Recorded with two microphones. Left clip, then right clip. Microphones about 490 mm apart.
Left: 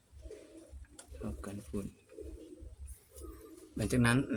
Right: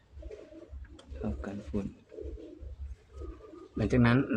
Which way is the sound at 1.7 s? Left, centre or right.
Left.